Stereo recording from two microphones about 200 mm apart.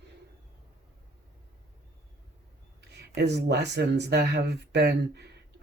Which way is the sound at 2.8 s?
55° right (ahead or behind).